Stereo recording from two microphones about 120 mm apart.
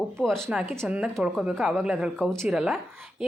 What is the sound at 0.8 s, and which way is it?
Speech, 10° right (ahead or behind).